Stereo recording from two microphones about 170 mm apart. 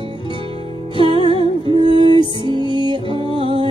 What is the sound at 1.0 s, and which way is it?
Music, 30° right (ahead or behind).